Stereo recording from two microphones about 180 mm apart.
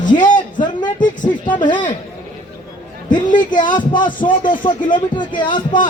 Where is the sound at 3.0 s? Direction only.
25° left (ahead or behind).